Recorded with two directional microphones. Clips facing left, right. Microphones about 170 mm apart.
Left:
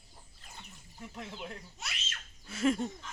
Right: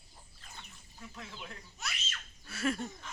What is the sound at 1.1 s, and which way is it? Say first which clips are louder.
Speech: left 5 dB; 25° left (ahead or behind).